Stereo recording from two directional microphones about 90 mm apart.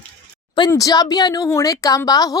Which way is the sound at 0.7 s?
40° left (ahead or behind).